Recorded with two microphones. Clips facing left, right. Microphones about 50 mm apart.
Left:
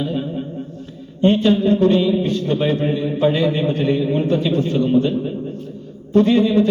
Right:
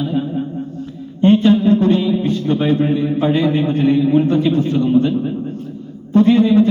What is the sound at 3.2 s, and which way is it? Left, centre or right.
A man's voice, right.